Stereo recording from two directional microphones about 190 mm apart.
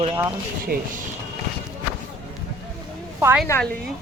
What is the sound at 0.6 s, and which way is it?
Speech, 50° right (ahead or behind).